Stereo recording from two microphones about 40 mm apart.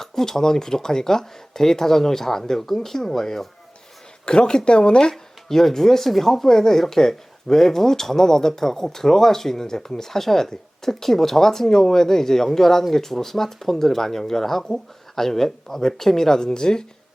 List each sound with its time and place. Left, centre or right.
0.0 s speech: centre
4.3 s speech: left
5.1 s speech: centre